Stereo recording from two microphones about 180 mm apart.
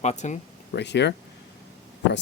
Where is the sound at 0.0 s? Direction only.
40° left (ahead or behind).